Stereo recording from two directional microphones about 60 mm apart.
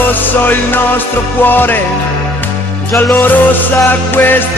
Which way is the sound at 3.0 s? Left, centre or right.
Left.